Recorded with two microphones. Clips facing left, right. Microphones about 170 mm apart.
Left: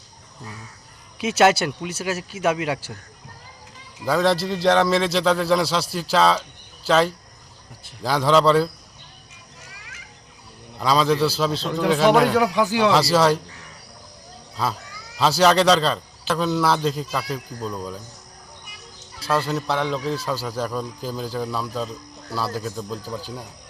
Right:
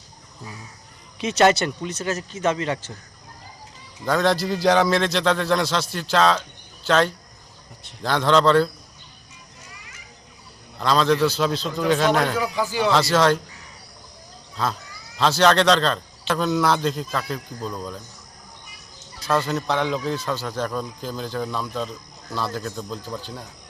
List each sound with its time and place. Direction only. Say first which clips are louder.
1.2 s speech: even; 5° left (ahead or behind)
4.0 s speech: left 1 dB; 5° left (ahead or behind)
10.8 s speech: even; 10° left (ahead or behind)
12.3 s a man's voice: left 5 dB; 70° left (ahead or behind)
12.9 s speech: right 3 dB; 10° left (ahead or behind)
14.5 s speech: even; 5° left (ahead or behind)
19.3 s speech: even; 10° left (ahead or behind)